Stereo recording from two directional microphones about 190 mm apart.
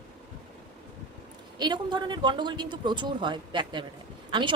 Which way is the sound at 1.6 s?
20° right (ahead or behind).